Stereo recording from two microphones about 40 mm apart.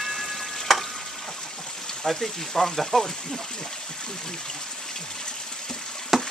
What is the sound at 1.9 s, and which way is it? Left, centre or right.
Speech, centre.